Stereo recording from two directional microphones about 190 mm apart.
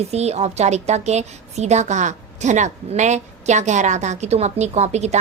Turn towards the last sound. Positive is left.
turn(degrees=-35)  # may be behind; listen again after turning